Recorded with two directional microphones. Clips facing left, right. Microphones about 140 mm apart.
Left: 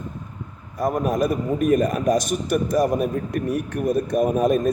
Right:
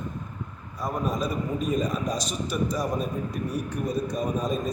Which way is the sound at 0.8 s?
60° left (ahead or behind).